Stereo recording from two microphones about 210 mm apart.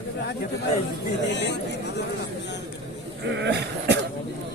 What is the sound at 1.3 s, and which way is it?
Speech, 55° left (ahead or behind).